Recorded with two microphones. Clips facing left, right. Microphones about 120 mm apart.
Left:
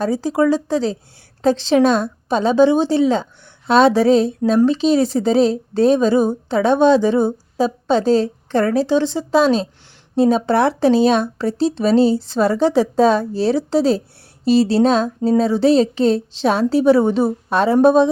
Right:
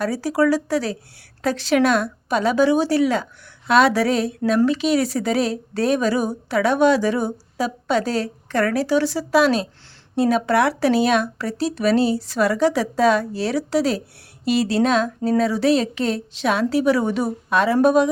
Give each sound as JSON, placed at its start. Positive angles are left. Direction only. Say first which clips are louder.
{"t": 0.0, "sound": "a woman's voice", "louder": "left 3 dB", "side_deg": 20}